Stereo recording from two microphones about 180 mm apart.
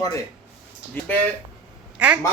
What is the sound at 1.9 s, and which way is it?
Speech, 5° right (ahead or behind).